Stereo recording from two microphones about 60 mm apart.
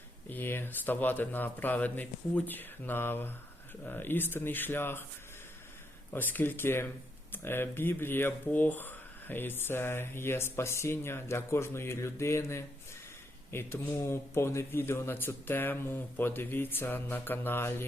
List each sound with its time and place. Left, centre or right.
0.3 s speech: left
6.1 s speech: left